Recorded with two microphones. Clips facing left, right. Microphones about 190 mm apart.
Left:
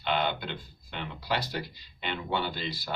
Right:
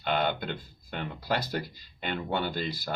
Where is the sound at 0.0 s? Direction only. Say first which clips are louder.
Right 1 dB; 45° right (ahead or behind).